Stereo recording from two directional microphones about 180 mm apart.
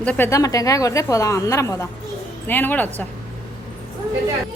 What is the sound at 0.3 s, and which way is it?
A woman's voice, 20° left (ahead or behind).